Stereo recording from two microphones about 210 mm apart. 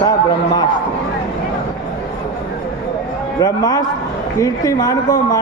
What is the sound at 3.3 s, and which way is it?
A man's voice, 20° left (ahead or behind).